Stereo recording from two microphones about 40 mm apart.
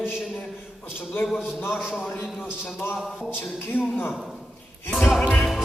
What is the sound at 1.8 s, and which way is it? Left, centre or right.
Speech, centre.